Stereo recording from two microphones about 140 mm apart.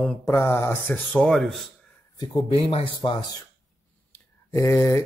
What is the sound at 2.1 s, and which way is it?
Speech, 30° left (ahead or behind).